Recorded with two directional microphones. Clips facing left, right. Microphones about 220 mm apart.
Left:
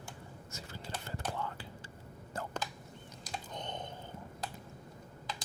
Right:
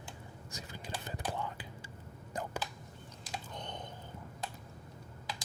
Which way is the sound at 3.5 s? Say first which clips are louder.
Left 5 dB; 20° left (ahead or behind).